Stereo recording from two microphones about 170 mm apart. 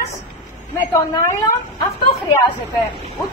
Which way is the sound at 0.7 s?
20° left (ahead or behind).